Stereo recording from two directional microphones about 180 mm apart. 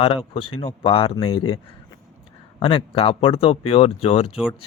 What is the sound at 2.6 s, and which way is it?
Speech, 30° left (ahead or behind).